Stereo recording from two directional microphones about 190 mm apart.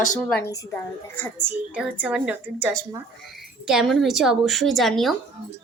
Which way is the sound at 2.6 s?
20° right (ahead or behind).